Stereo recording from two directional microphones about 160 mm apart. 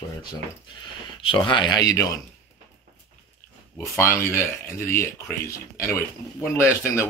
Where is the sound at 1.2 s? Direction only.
30° left (ahead or behind).